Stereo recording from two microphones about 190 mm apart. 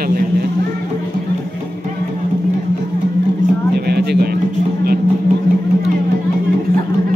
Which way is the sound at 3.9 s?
55° right (ahead or behind).